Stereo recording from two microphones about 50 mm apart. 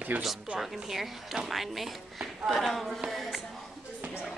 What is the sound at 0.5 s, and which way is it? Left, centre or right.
A woman's voice, centre.